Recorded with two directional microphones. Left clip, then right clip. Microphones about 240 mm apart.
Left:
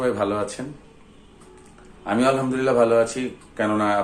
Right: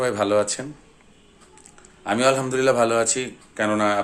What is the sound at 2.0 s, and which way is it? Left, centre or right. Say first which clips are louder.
A man's voice: right 1 dB; right.